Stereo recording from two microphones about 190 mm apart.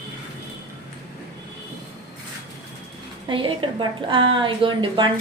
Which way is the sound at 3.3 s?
25° right (ahead or behind).